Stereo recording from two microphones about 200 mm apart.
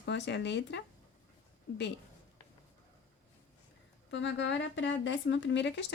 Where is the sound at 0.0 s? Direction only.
60° left (ahead or behind).